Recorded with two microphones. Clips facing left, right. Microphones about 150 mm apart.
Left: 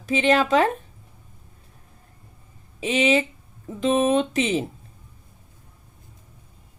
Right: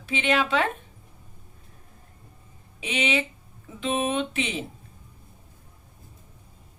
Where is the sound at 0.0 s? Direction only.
40° left (ahead or behind).